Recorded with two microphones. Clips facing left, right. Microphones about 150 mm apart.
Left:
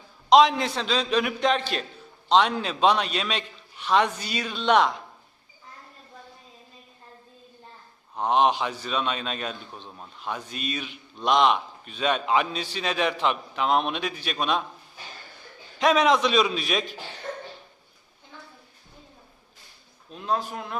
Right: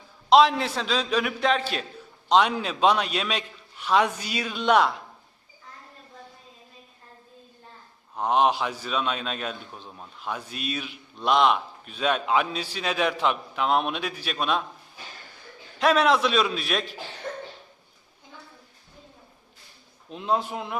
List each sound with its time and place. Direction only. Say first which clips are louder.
0.3 s a man's voice: even; 5° right (ahead or behind)
8.1 s a man's voice: even; 5° right (ahead or behind)
15.8 s a man's voice: even; centre (ahead or behind)
20.1 s a man's voice: right 2 dB; 20° right (ahead or behind)